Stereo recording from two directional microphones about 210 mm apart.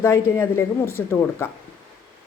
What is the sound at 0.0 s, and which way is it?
Speech, 15° left (ahead or behind).